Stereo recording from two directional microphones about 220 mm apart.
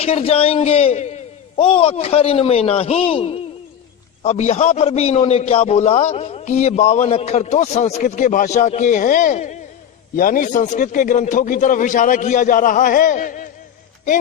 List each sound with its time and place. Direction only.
0.0 s a man's voice: 25° left (ahead or behind)